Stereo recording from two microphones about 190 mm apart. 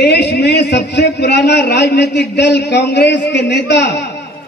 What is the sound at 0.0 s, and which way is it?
A man's voice, 60° left (ahead or behind).